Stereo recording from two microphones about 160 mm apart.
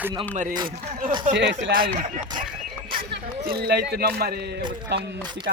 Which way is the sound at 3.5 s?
75° right (ahead or behind).